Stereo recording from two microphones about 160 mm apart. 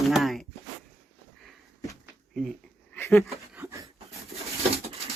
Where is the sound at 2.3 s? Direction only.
Centre (ahead or behind).